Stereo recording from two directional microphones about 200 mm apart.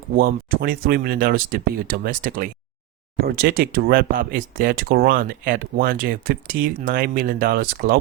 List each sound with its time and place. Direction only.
0.2 s speech: 50° right (ahead or behind)